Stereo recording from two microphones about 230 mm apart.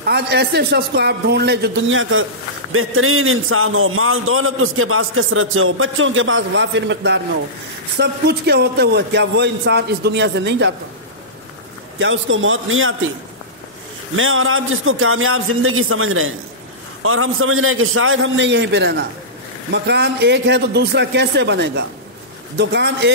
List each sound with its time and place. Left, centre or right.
0.0 s a man's voice: right
12.0 s a man's voice: right
14.1 s a man's voice: right